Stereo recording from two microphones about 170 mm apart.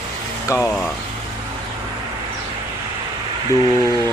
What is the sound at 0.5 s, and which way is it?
Speech, 15° left (ahead or behind).